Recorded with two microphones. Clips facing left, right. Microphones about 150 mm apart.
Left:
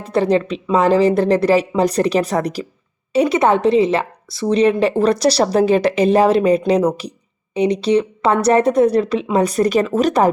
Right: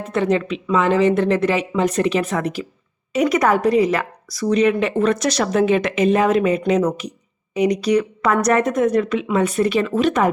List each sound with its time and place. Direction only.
0.0 s a woman's voice: 35° left (ahead or behind)